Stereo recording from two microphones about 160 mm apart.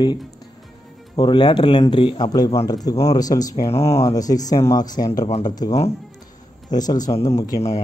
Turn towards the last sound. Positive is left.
turn(degrees=20)  # may be behind; listen again after turning